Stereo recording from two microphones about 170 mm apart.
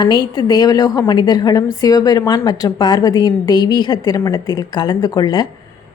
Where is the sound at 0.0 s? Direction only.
25° left (ahead or behind).